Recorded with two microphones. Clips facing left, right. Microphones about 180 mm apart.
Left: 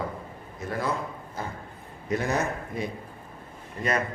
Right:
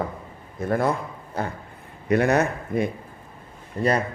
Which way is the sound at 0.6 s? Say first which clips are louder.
Right 8 dB; 55° right (ahead or behind).